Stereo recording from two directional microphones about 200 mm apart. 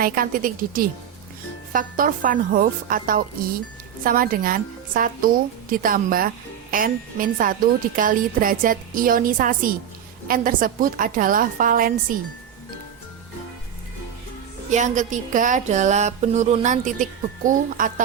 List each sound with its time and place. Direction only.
0.0 s a woman's voice: 45° right (ahead or behind)
14.7 s a woman's voice: 40° right (ahead or behind)